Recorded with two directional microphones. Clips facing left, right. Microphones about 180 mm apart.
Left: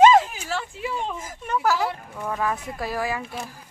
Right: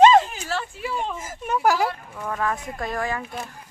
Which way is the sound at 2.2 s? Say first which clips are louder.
Even; 10° left (ahead or behind).